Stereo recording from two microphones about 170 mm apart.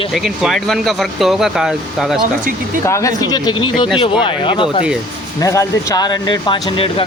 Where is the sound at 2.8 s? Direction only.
20° left (ahead or behind).